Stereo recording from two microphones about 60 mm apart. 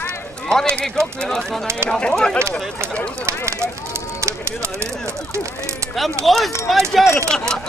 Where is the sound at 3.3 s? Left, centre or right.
Right.